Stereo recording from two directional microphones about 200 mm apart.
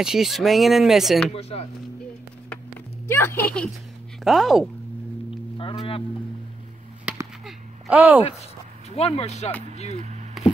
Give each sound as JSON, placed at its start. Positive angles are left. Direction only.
{"t": 0.0, "sound": "speech", "side_deg": 0}
{"t": 1.3, "sound": "speech", "side_deg": 30}
{"t": 3.1, "sound": "speech", "side_deg": 10}
{"t": 5.6, "sound": "speech", "side_deg": 25}
{"t": 7.1, "sound": "chop", "side_deg": -5}
{"t": 8.9, "sound": "speech", "side_deg": 30}